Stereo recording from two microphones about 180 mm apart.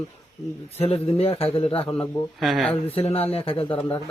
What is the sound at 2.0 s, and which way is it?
Speech, centre (ahead or behind).